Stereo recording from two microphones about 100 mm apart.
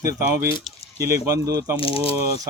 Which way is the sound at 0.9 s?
30° right (ahead or behind).